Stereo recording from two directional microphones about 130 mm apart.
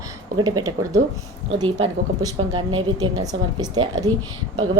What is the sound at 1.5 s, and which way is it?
Speech, 40° right (ahead or behind).